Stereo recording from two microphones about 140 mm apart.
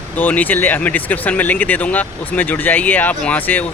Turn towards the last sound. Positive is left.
turn(degrees=10)  # may be behind; listen again after turning